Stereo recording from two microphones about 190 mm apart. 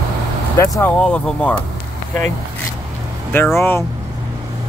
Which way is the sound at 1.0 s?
5° left (ahead or behind).